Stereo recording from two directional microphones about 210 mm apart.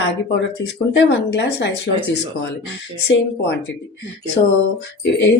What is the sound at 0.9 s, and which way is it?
Speech, 55° left (ahead or behind).